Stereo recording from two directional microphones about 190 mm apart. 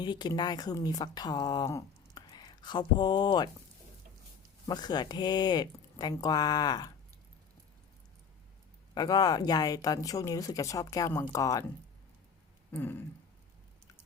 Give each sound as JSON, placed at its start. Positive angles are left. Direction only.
{"t": 0.0, "sound": "speech", "side_deg": 20}
{"t": 4.6, "sound": "speech", "side_deg": 20}
{"t": 9.0, "sound": "speech", "side_deg": 20}
{"t": 12.7, "sound": "a sound", "side_deg": 10}